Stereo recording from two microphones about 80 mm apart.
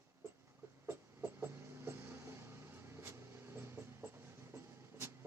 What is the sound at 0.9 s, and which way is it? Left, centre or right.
Vehicle, right.